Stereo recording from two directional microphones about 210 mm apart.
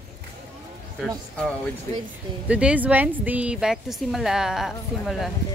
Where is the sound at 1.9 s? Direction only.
10° left (ahead or behind).